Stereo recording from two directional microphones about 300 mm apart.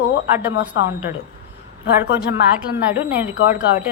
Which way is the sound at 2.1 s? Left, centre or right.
Centre.